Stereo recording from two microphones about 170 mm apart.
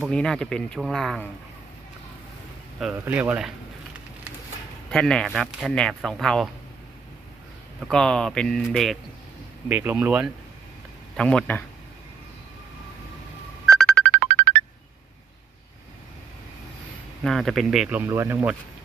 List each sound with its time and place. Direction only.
0.0 s speech: 5° left (ahead or behind)
2.9 s speech: 10° right (ahead or behind)
4.9 s speech: 5° left (ahead or behind)
7.9 s speech: 5° left (ahead or behind)
9.6 s speech: 10° right (ahead or behind)
11.2 s speech: 5° left (ahead or behind)
13.7 s music: 5° left (ahead or behind)
14.3 s music: 45° right (ahead or behind)
17.2 s speech: centre (ahead or behind)